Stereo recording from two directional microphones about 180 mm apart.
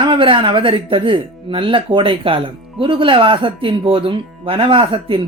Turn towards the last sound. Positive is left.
turn(degrees=-30)  # may be behind; listen again after turning